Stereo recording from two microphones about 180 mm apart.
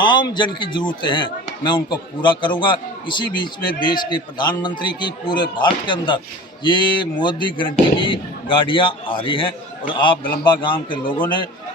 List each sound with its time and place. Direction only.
0.0 s speech: 25° left (ahead or behind)